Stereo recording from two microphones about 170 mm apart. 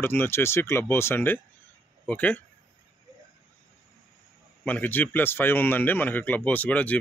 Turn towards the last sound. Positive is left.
turn(degrees=10)  # may be behind; listen again after turning